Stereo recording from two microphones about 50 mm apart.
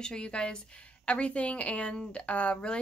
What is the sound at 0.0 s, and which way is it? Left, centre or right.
A woman's voice, centre.